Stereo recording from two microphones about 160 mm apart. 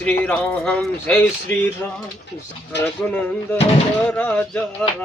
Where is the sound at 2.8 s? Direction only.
10° left (ahead or behind).